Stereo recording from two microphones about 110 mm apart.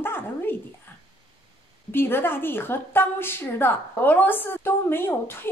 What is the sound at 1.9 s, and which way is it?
A woman's voice, 20° left (ahead or behind).